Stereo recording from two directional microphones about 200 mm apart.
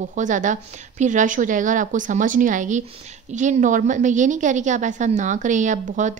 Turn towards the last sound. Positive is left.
turn(degrees=-40)  # may be behind; listen again after turning